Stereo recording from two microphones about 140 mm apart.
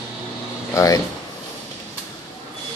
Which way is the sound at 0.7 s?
25° left (ahead or behind).